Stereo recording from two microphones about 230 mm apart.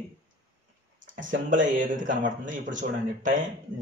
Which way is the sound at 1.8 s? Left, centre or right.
Right.